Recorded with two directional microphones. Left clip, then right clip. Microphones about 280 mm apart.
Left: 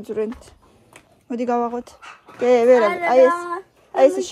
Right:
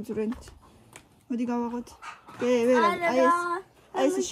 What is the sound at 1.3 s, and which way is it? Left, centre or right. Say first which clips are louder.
Speech: left 9 dB; centre.